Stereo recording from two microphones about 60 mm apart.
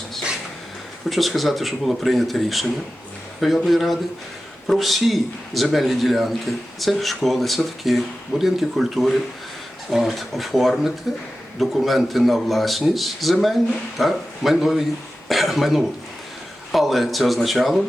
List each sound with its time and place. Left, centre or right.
1.1 s speech: centre